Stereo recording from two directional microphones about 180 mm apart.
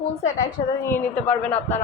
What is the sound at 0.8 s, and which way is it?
Speech, 10° left (ahead or behind).